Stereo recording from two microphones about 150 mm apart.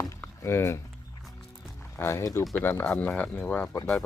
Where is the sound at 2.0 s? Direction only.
20° left (ahead or behind).